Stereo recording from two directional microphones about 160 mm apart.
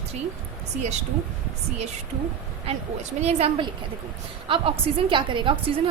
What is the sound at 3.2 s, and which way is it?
A woman's voice, 40° right (ahead or behind).